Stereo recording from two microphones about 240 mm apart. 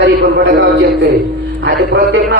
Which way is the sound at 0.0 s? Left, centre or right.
Right.